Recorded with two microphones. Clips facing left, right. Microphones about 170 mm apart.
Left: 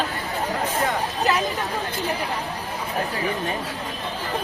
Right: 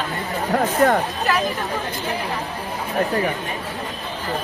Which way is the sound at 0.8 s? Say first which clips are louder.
Right 10 dB; 60° right (ahead or behind).